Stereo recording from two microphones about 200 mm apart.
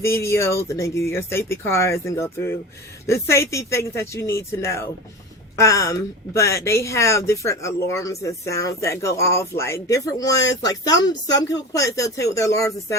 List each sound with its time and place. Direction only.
0.0 s speech: 15° left (ahead or behind)